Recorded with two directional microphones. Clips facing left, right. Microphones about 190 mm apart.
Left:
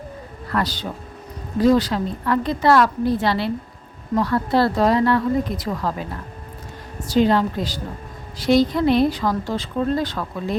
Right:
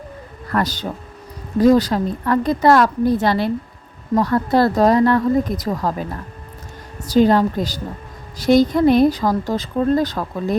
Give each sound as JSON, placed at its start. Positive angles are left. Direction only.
{"t": 0.5, "sound": "speech", "side_deg": -45}
{"t": 7.1, "sound": "speech", "side_deg": -45}